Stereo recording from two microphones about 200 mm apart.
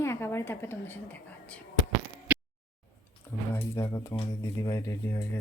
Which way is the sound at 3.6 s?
15° left (ahead or behind).